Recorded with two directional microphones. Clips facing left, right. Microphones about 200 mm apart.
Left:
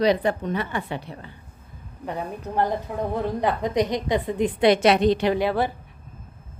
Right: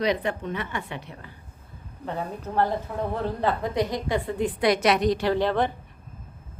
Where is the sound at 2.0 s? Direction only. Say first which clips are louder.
Left 1 dB; 15° left (ahead or behind).